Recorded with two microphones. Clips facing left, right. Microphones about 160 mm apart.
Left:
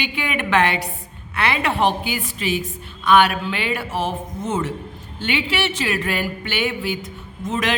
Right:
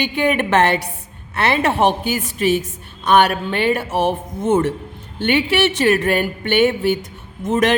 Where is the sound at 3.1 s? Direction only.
50° right (ahead or behind).